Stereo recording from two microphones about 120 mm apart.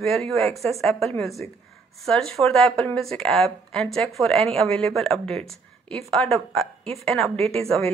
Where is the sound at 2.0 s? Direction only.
5° left (ahead or behind).